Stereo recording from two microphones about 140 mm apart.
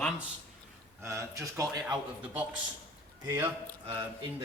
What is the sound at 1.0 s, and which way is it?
Speech, 20° right (ahead or behind).